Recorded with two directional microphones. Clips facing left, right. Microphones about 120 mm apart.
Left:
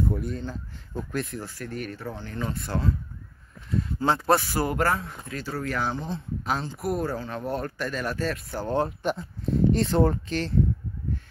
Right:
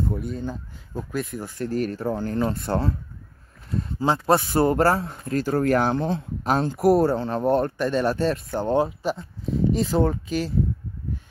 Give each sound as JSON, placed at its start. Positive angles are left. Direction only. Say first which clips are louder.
{"t": 0.1, "sound": "speech", "louder": "right 2 dB", "side_deg": 0}
{"t": 1.6, "sound": "speech", "louder": "right 11 dB", "side_deg": -35}
{"t": 4.3, "sound": "speech", "louder": "right 7 dB", "side_deg": -25}
{"t": 5.4, "sound": "speech", "louder": "right 9 dB", "side_deg": -50}
{"t": 6.4, "sound": "speech", "louder": "right 8 dB", "side_deg": -50}
{"t": 6.9, "sound": "speech", "louder": "right 9 dB", "side_deg": -30}
{"t": 8.8, "sound": "speech", "louder": "right 1 dB", "side_deg": 0}